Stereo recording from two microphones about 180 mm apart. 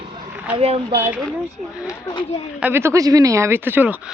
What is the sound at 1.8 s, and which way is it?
Speech, 15° left (ahead or behind).